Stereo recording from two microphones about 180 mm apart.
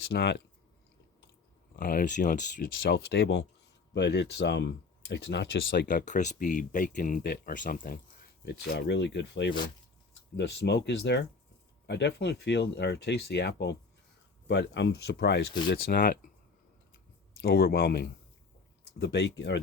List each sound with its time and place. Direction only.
0.1 s speech: 70° left (ahead or behind)
1.8 s speech: 50° left (ahead or behind)
2.9 s speech: 70° left (ahead or behind); by 7.9 s 50° left (ahead or behind)
8.4 s speech: 75° left (ahead or behind); by 16.1 s 55° left (ahead or behind)
17.4 s speech: 60° left (ahead or behind); by 19.6 s 75° left (ahead or behind)